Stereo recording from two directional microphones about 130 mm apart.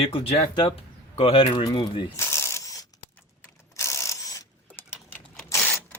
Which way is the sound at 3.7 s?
20° left (ahead or behind).